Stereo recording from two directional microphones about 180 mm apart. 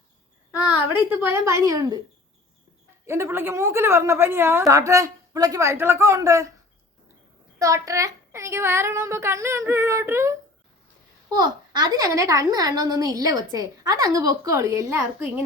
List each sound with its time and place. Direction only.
0.5 s a sound: 5° right (ahead or behind)
1.2 s a woman's voice: 15° right (ahead or behind)
3.1 s a woman's voice: 15° right (ahead or behind)
7.6 s a woman's voice: 20° right (ahead or behind)